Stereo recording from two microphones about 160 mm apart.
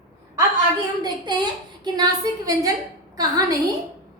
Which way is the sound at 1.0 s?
25° right (ahead or behind).